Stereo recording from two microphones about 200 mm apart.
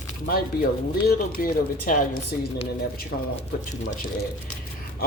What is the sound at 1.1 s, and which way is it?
Speech, 45° left (ahead or behind).